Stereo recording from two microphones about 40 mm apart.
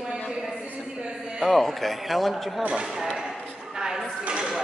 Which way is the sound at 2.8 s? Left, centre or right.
Centre.